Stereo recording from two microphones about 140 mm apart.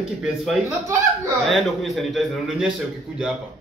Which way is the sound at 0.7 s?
20° right (ahead or behind).